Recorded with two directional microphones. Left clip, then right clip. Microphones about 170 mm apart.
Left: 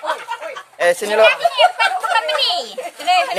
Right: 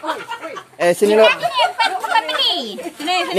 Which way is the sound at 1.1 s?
65° left (ahead or behind).